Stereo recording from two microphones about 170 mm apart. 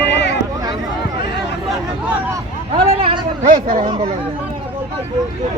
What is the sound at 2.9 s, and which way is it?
A man's voice, 30° right (ahead or behind).